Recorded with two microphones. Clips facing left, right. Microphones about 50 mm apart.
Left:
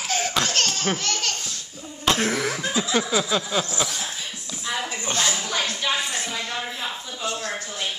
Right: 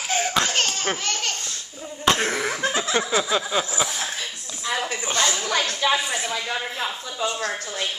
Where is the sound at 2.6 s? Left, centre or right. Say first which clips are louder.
Right 1 dB; right.